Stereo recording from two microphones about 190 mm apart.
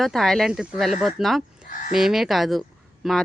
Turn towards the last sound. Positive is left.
turn(degrees=0)  # may be behind; listen again after turning